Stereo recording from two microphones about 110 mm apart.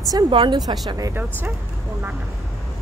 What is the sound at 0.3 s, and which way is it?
Speech, 45° right (ahead or behind).